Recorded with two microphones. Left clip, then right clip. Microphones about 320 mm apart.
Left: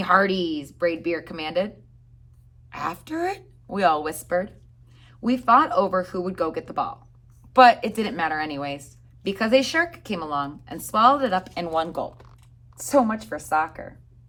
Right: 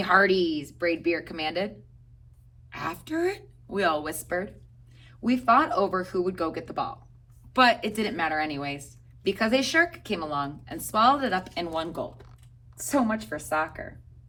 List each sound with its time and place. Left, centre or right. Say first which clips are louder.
0.0 s speech: left 1 dB; centre
2.6 s speech: left 3 dB; centre